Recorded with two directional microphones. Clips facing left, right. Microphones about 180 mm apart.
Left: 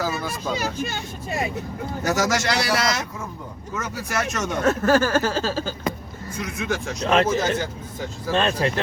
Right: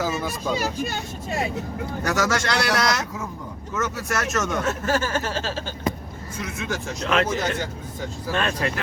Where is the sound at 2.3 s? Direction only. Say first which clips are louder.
Even; 10° left (ahead or behind).